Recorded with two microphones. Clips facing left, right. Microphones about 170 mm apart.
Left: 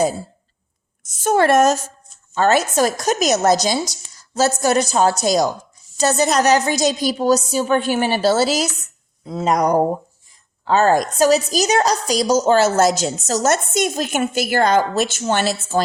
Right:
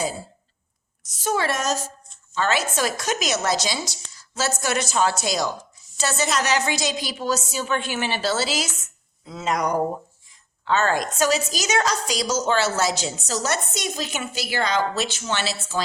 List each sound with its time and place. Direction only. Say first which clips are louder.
1.0 s a woman's voice: left 8 dB; 55° left (ahead or behind)